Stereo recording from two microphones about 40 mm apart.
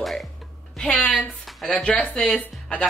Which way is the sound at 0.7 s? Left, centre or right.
Left.